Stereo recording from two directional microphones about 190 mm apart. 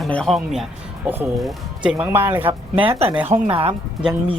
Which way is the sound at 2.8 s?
25° right (ahead or behind).